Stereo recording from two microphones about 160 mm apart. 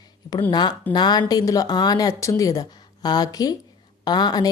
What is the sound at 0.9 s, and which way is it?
Speech, 25° left (ahead or behind).